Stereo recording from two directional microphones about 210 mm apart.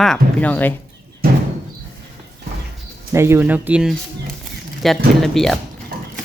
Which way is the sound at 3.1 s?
10° right (ahead or behind).